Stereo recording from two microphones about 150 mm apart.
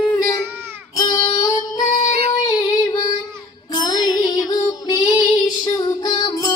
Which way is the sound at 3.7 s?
25° left (ahead or behind).